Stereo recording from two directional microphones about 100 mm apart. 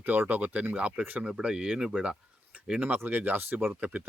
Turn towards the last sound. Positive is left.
turn(degrees=-15)  # may be behind; listen again after turning